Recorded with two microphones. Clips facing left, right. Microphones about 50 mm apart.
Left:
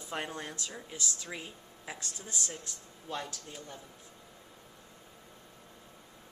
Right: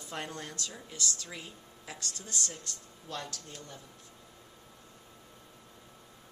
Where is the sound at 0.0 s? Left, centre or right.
Centre.